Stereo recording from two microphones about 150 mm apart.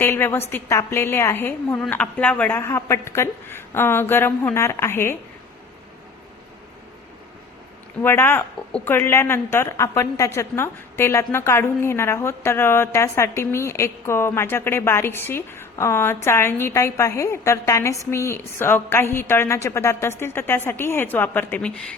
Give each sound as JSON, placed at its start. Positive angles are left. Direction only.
{"t": 0.0, "sound": "a woman's voice", "side_deg": 15}
{"t": 8.0, "sound": "a woman's voice", "side_deg": 15}